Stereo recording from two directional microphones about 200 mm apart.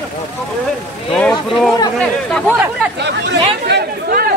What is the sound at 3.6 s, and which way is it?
Chatter, 50° right (ahead or behind).